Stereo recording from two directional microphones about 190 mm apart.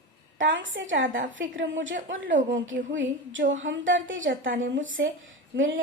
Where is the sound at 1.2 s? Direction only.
45° right (ahead or behind).